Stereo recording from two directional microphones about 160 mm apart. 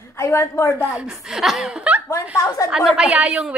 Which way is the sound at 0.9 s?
5° right (ahead or behind).